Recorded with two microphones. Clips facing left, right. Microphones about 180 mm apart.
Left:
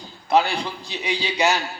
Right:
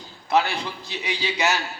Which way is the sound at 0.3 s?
15° left (ahead or behind).